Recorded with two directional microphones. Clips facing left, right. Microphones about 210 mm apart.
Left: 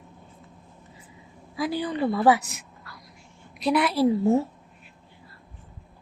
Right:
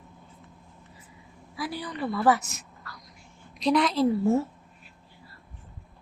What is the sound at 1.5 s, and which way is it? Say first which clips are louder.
Speech: left 7 dB; 30° left (ahead or behind).